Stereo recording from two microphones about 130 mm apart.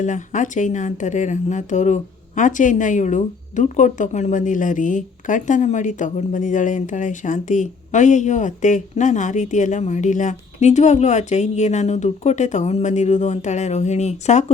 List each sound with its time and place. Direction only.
0.0 s speech: 75° left (ahead or behind)